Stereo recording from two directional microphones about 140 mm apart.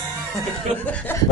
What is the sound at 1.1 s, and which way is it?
Speech, 15° left (ahead or behind).